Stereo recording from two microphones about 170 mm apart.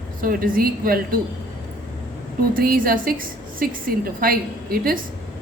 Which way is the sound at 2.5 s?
55° right (ahead or behind).